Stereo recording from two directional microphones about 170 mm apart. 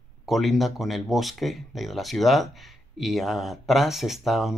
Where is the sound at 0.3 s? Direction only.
Centre (ahead or behind).